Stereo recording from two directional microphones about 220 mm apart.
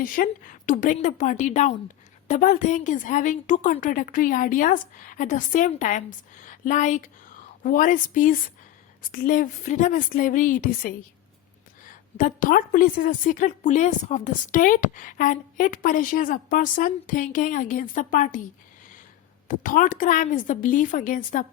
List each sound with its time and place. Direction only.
0.0 s a woman's voice: 40° left (ahead or behind)
19.5 s a woman's voice: 35° left (ahead or behind)